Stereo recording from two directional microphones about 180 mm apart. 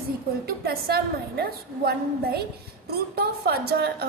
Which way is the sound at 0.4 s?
60° right (ahead or behind).